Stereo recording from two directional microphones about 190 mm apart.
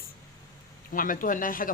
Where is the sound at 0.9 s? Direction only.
45° left (ahead or behind).